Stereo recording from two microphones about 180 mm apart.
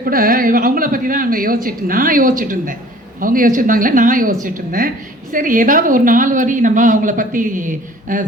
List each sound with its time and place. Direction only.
0.0 s speech: 55° right (ahead or behind)